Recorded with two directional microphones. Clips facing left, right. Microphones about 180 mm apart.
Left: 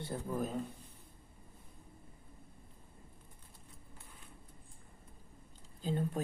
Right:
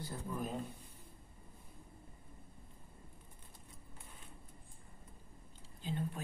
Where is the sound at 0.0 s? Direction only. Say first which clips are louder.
Left 4 dB; 30° left (ahead or behind).